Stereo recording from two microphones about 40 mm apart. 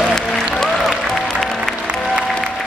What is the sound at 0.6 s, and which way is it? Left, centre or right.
Applause, centre.